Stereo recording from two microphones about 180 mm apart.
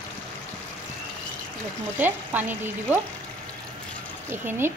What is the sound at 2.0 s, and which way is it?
Speech, 10° right (ahead or behind).